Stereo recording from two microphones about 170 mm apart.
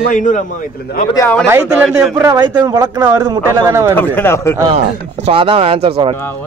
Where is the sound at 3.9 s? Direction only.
10° left (ahead or behind).